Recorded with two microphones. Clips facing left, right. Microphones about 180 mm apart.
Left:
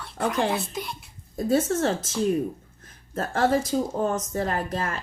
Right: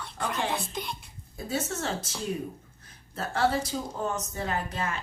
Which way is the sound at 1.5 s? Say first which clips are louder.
Left 9 dB; 50° left (ahead or behind).